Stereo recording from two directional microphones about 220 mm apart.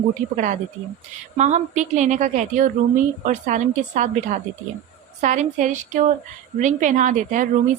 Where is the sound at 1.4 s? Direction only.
35° right (ahead or behind).